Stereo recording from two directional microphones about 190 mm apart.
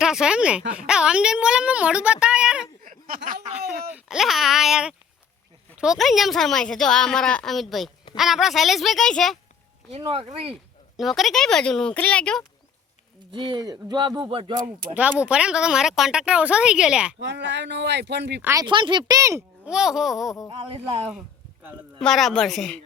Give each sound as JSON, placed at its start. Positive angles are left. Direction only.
{"t": 0.0, "sound": "speech", "side_deg": -5}
{"t": 2.8, "sound": "a sound", "side_deg": -45}
{"t": 3.7, "sound": "speech", "side_deg": -5}
{"t": 9.9, "sound": "speech", "side_deg": -30}
{"t": 10.5, "sound": "speech", "side_deg": 0}
{"t": 13.3, "sound": "speech", "side_deg": -25}
{"t": 14.9, "sound": "speech", "side_deg": -5}
{"t": 17.2, "sound": "speech", "side_deg": -65}
{"t": 18.4, "sound": "speech", "side_deg": -20}
{"t": 19.7, "sound": "speech", "side_deg": -5}
{"t": 20.5, "sound": "speech", "side_deg": -30}
{"t": 21.1, "sound": "a sound", "side_deg": -5}
{"t": 22.0, "sound": "speech", "side_deg": 0}